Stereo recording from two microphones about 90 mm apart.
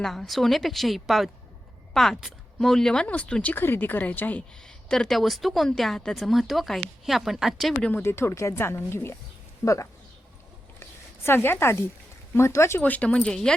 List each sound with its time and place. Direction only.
0.0 s speech: 5° left (ahead or behind); by 4.4 s 20° left (ahead or behind)
4.9 s speech: 5° left (ahead or behind)
7.8 s speech: 15° left (ahead or behind)
8.0 s speech: 30° left (ahead or behind)
10.8 s a sound: 25° left (ahead or behind)
12.3 s speech: 30° left (ahead or behind)
12.8 s speech: 15° left (ahead or behind)